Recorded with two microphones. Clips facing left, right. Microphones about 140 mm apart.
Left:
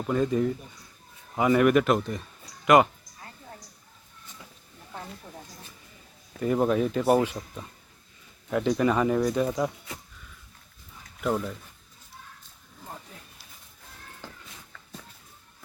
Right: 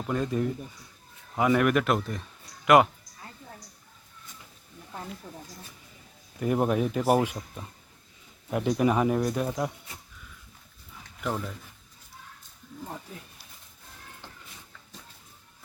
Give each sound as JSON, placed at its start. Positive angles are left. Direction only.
{"t": 0.1, "sound": "speech", "side_deg": 0}
{"t": 6.4, "sound": "a man's voice", "side_deg": -10}
{"t": 11.2, "sound": "speech", "side_deg": 5}